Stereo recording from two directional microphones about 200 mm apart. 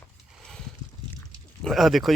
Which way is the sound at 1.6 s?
Centre (ahead or behind).